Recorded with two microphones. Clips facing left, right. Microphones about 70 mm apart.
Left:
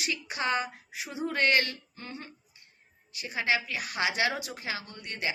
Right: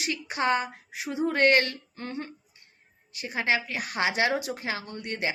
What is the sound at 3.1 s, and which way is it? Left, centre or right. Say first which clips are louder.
A woman's voice: right 2 dB; right.